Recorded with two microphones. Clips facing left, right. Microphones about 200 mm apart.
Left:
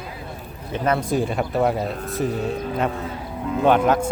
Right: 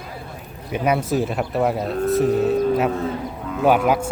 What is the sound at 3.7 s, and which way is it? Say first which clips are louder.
Speech: even; 10° right (ahead or behind).